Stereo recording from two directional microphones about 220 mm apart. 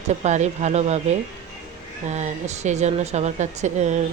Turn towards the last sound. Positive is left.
turn(degrees=-30)  # may be behind; listen again after turning